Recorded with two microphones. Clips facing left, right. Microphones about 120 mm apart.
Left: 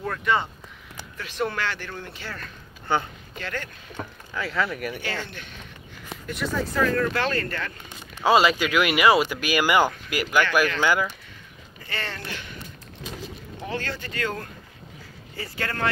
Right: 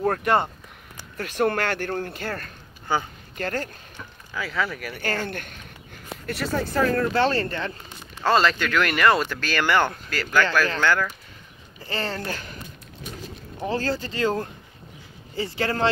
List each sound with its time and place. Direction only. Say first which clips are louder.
0.0 s speech: right 4 dB; 50° right (ahead or behind)
4.3 s speech: even; centre (ahead or behind)
5.0 s speech: right 4 dB; 45° right (ahead or behind)
6.2 s speech: right 1 dB; 70° right (ahead or behind)
6.7 s speech: right 2 dB; 35° right (ahead or behind)
8.2 s speech: left 1 dB; 10° left (ahead or behind)
11.8 s speech: right 5 dB; 30° right (ahead or behind)
13.7 s speech: right 6 dB; 35° right (ahead or behind)